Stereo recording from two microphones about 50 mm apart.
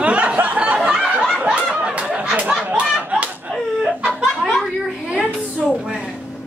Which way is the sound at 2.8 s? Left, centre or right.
Centre.